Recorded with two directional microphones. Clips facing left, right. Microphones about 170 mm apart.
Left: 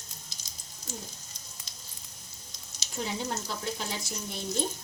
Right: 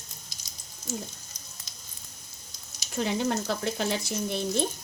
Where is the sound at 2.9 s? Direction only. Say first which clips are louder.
Right 6 dB; 65° right (ahead or behind).